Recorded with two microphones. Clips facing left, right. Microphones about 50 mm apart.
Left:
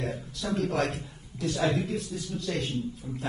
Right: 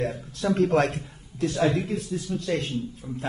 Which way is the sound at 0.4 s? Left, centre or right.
Right.